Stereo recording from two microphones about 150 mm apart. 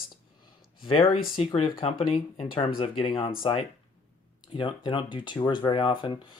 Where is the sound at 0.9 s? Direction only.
35° left (ahead or behind).